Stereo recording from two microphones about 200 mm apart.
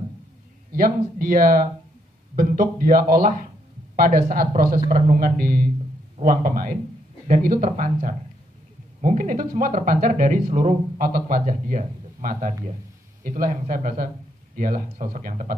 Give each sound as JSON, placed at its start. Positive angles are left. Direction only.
{"t": 0.7, "sound": "speech", "side_deg": -45}